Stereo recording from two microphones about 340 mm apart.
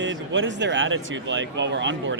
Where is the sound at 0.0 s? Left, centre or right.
Right.